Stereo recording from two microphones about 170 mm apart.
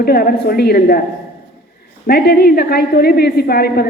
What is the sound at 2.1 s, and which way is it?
A woman's voice, 65° left (ahead or behind).